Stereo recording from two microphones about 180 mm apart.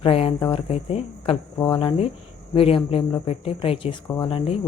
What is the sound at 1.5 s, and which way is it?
Speech, 20° left (ahead or behind).